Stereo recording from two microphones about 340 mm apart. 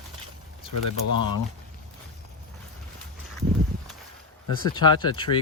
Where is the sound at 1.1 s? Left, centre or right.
Right.